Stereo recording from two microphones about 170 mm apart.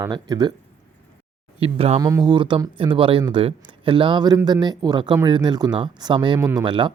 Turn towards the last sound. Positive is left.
turn(degrees=-30)  # may be behind; listen again after turning